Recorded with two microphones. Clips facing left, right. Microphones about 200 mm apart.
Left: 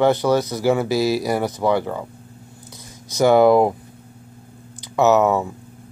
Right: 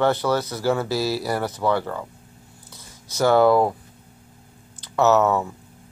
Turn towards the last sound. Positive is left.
turn(degrees=15)  # may be behind; listen again after turning